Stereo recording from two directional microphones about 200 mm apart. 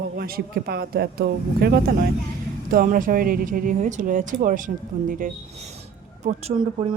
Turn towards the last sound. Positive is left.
turn(degrees=-30)  # may be behind; listen again after turning